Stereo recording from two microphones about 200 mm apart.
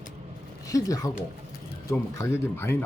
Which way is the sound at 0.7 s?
15° left (ahead or behind).